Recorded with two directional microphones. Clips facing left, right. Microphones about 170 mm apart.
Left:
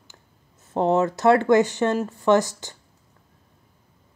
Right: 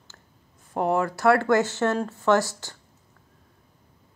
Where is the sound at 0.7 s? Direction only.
25° left (ahead or behind).